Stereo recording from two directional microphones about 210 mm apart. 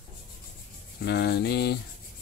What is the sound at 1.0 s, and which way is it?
Speech, 50° left (ahead or behind).